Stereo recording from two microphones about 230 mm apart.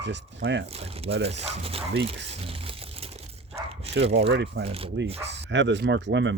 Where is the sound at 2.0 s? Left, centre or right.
Right.